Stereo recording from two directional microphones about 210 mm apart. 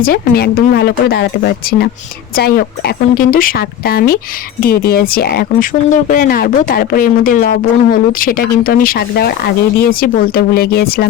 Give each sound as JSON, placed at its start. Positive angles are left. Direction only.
{"t": 0.0, "sound": "speech", "side_deg": 45}